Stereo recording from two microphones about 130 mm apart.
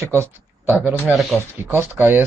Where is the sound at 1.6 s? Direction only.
20° right (ahead or behind).